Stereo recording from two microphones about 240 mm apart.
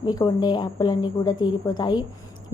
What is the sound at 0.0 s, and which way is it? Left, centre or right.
A woman's voice, centre.